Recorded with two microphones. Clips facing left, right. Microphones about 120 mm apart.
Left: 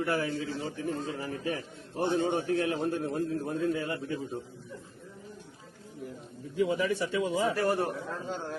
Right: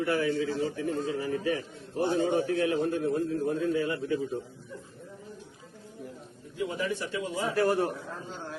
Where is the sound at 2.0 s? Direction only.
40° right (ahead or behind).